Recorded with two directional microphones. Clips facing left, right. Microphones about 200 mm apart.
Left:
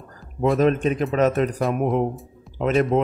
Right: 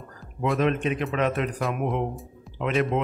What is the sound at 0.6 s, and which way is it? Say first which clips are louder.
A man's voice: left 4 dB; 40° left (ahead or behind).